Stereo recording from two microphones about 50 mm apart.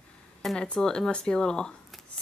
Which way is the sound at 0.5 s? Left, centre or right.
Centre.